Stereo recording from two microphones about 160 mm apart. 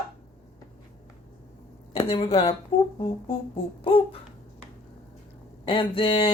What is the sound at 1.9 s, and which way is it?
Speech, 35° left (ahead or behind).